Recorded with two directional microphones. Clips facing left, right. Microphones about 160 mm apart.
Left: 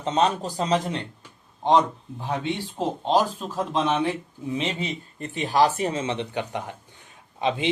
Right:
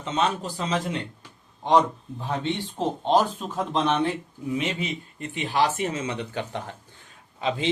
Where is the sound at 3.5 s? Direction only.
Centre (ahead or behind).